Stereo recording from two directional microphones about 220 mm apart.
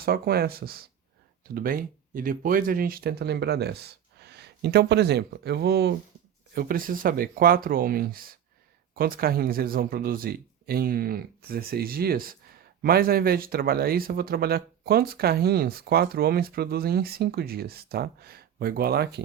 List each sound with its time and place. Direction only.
0.0 s speech: 45° right (ahead or behind)